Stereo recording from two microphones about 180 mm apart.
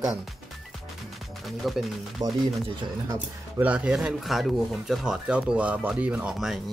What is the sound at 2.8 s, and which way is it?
Speech, 20° right (ahead or behind).